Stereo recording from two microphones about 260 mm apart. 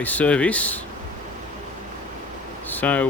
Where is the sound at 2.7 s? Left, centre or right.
Centre.